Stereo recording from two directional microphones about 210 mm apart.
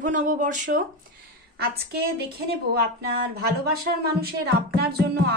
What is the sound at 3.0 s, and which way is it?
Speech, 50° right (ahead or behind).